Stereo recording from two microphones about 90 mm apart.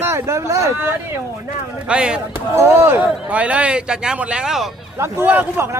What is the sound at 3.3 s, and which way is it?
Speech, 15° right (ahead or behind).